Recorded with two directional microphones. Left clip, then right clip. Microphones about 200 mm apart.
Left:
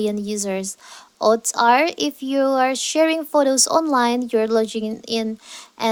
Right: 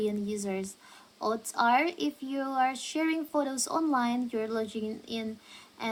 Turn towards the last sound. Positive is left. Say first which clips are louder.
# left 14 dB
turn(degrees=50)  # may be behind; listen again after turning